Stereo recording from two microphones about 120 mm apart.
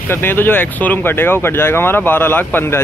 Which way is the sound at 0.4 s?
15° left (ahead or behind).